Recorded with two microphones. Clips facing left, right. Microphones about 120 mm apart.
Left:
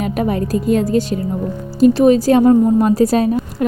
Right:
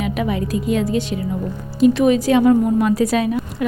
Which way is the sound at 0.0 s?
45° left (ahead or behind).